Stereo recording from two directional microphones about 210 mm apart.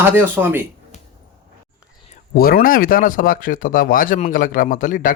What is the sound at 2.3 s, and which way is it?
Speech, 45° left (ahead or behind).